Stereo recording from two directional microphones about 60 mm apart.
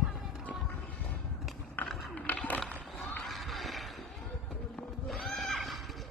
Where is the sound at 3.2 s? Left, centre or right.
Centre.